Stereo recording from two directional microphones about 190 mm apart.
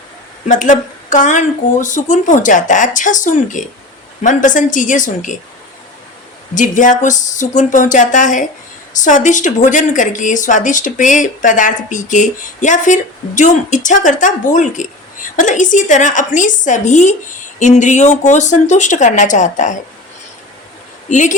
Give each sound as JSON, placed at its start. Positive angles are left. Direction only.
{"t": 0.4, "sound": "a woman's voice", "side_deg": 40}
{"t": 6.5, "sound": "a woman's voice", "side_deg": 40}
{"t": 21.1, "sound": "a woman's voice", "side_deg": 40}